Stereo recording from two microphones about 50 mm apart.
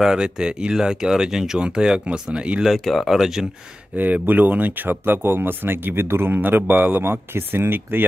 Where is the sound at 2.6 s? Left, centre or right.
Centre.